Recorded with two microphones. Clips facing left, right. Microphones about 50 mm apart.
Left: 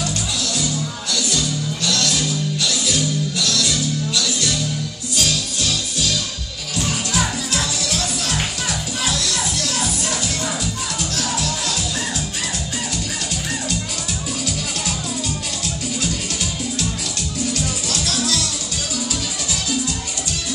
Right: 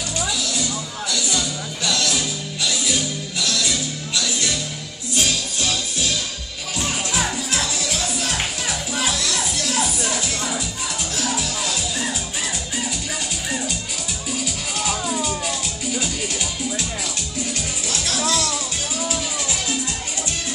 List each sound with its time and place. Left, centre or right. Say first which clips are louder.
1.1 s music: left 2 dB; centre
11.1 s music: even; centre
17.6 s music: left 3 dB; right